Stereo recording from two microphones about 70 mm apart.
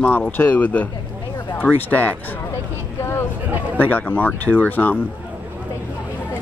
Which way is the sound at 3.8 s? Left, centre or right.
Left.